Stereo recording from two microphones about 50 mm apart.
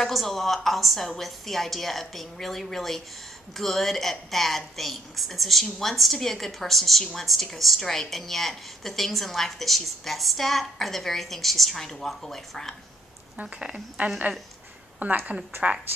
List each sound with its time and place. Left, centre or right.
0.0 s a woman's voice: centre
13.4 s speech: right
14.0 s a woman's voice: right
15.5 s a woman's voice: right